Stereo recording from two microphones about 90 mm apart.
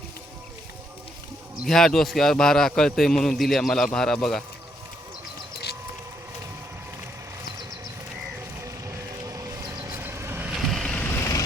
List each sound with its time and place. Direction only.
1.6 s a man's voice: 5° left (ahead or behind)
9.8 s vehicle: 25° right (ahead or behind)
10.7 s vehicle: 5° left (ahead or behind)
11.1 s vehicle: 35° left (ahead or behind)